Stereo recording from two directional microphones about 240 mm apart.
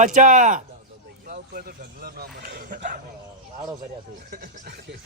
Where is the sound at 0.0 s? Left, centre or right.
Right.